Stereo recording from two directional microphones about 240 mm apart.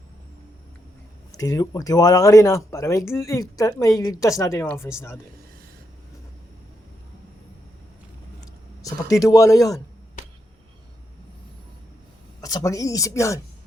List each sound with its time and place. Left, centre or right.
1.3 s a woman's voice: centre
8.8 s a woman's voice: centre
10.2 s a sound: left
12.4 s a woman's voice: centre